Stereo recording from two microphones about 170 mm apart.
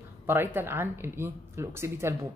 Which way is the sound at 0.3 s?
15° right (ahead or behind).